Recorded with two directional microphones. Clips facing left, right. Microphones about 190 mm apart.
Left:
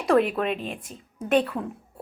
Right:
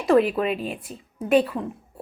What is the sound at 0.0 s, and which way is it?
A woman's voice, centre (ahead or behind).